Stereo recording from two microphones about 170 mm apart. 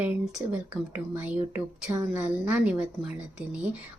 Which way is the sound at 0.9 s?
10° right (ahead or behind).